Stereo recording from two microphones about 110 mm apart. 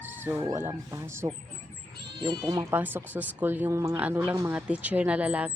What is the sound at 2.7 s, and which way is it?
Speech, 15° right (ahead or behind).